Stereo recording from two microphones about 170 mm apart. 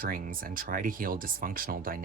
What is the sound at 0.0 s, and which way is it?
Speech, 55° right (ahead or behind).